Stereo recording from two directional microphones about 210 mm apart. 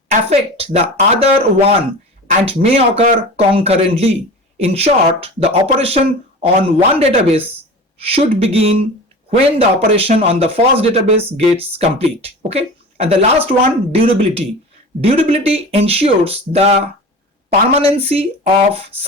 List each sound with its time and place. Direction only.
0.1 s speech: 30° right (ahead or behind)